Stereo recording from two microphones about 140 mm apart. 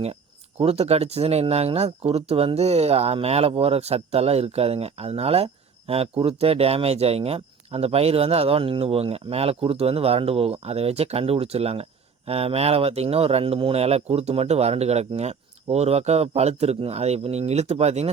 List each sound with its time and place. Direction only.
0.6 s speech: 45° right (ahead or behind)